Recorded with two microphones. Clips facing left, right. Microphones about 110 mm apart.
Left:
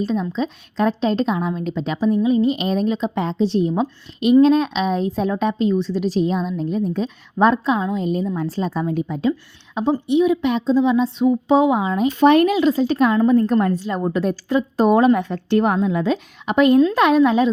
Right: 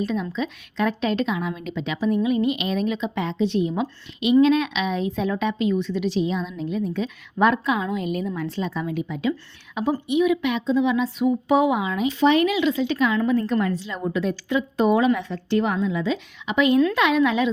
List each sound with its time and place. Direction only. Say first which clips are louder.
0.0 s a woman's voice: left 4 dB; 30° left (ahead or behind)
8.4 s a woman's voice: left 4 dB; 40° left (ahead or behind)